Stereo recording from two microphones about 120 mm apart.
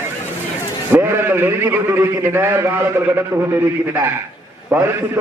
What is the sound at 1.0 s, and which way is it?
A man's voice, 20° right (ahead or behind).